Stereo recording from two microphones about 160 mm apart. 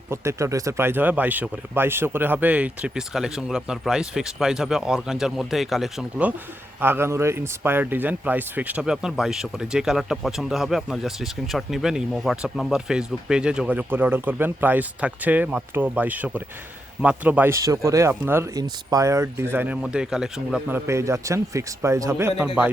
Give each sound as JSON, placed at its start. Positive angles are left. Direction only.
{"t": 0.1, "sound": "speech", "side_deg": -15}